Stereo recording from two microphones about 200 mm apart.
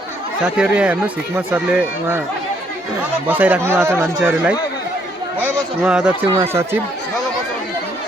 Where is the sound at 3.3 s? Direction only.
10° right (ahead or behind).